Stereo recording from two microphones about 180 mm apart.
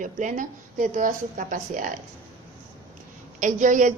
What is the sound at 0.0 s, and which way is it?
A woman's voice, 45° right (ahead or behind).